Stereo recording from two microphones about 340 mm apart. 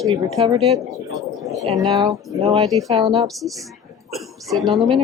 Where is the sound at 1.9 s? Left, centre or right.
Centre.